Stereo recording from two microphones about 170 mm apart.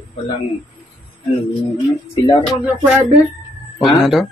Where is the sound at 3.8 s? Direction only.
Centre (ahead or behind).